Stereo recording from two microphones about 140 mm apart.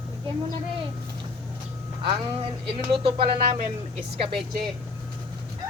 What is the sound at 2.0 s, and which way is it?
Speech, 35° right (ahead or behind).